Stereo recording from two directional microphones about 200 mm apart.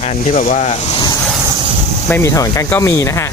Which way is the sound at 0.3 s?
40° left (ahead or behind).